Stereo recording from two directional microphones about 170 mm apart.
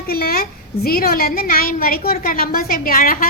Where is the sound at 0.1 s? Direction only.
65° left (ahead or behind).